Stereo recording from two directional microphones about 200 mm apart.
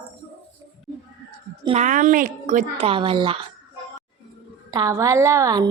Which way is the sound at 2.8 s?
25° right (ahead or behind).